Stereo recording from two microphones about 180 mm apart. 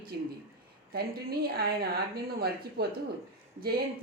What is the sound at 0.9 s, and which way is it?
Speech, 60° right (ahead or behind).